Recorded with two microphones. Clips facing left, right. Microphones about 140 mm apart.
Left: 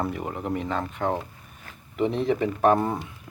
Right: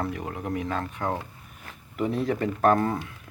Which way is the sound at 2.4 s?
5° left (ahead or behind).